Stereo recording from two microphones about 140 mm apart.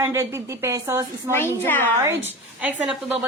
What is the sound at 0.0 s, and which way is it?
A woman's voice, 20° right (ahead or behind).